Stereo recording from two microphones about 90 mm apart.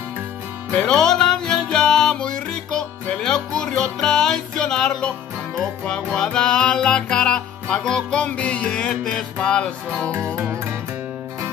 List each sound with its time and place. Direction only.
0.7 s music: 5° left (ahead or behind)
10.1 s music: 30° right (ahead or behind)